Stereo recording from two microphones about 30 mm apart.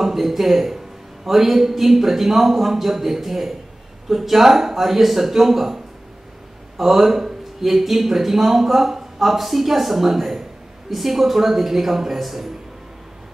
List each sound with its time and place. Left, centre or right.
0.0 s speech: centre
6.8 s speech: centre